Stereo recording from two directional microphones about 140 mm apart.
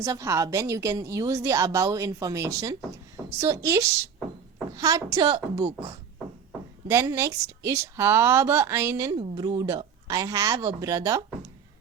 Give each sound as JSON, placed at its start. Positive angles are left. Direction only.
{"t": 0.0, "sound": "a woman's voice", "side_deg": -20}
{"t": 6.8, "sound": "a woman's voice", "side_deg": -20}
{"t": 9.3, "sound": "a woman's voice", "side_deg": -30}